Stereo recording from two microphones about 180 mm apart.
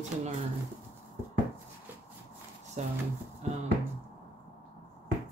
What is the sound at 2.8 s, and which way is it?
Speech, 40° right (ahead or behind).